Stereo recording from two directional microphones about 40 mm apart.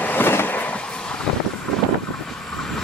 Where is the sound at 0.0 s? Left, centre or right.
Left.